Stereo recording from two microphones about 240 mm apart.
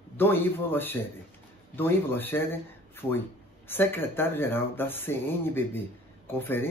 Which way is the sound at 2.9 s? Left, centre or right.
Centre.